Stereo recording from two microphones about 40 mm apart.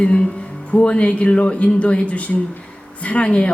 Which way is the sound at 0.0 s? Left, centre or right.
Left.